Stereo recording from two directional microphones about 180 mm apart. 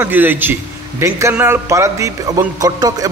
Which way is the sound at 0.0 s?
10° right (ahead or behind).